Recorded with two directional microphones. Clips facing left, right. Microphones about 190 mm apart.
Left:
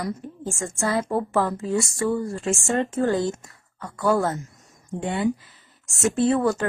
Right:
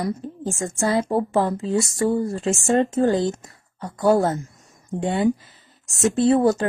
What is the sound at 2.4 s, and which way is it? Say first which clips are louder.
Speech: right 4 dB; 20° right (ahead or behind).